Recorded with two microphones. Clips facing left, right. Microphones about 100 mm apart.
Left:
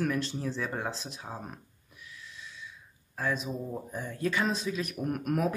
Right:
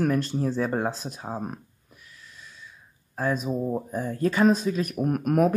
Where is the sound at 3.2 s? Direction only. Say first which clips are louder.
Right 6 dB; 45° right (ahead or behind).